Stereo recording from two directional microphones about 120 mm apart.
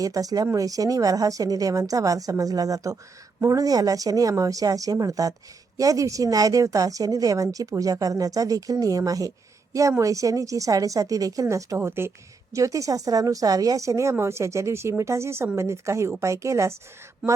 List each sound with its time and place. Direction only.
0.0 s speech: 30° right (ahead or behind)